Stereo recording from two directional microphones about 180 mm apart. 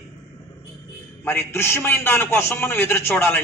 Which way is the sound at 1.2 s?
10° left (ahead or behind).